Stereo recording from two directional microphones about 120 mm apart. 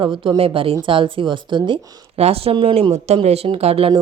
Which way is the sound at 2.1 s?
55° right (ahead or behind).